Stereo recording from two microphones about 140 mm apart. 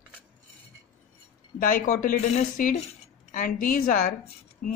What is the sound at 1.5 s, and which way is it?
Speech, 80° left.